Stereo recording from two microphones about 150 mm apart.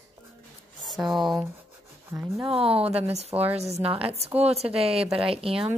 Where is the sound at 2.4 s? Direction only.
40° right (ahead or behind).